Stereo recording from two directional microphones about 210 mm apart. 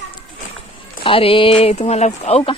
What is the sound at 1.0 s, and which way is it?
Speech, 25° left (ahead or behind).